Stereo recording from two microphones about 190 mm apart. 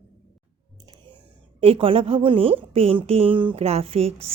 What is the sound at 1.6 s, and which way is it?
A woman's voice, 30° right (ahead or behind).